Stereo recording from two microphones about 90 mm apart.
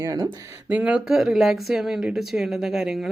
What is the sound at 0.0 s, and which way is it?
Speech, 40° right (ahead or behind).